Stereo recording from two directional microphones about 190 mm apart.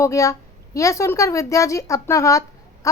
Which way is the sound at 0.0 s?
15° left (ahead or behind).